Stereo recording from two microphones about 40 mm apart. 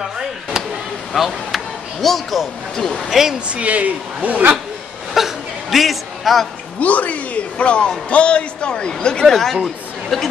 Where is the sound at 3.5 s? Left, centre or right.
Right.